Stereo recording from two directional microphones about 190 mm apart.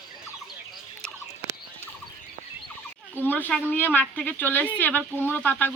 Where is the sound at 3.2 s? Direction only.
10° left (ahead or behind).